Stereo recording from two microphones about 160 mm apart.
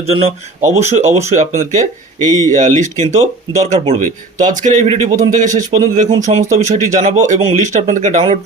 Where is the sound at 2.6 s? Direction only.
50° right (ahead or behind).